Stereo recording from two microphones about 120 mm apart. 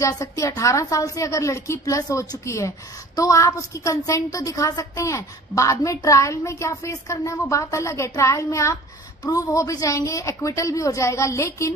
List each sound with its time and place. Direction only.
0.0 s a woman's voice: 25° left (ahead or behind)